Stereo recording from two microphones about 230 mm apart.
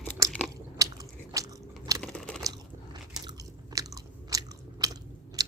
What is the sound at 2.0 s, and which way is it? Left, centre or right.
Chewing, centre.